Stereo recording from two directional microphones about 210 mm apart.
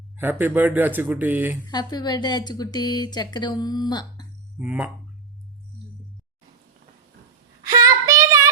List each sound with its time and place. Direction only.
0.2 s speech: 10° right (ahead or behind)
1.7 s speech: 20° left (ahead or behind)
4.5 s speech: 5° right (ahead or behind)
7.6 s child singing: 15° right (ahead or behind)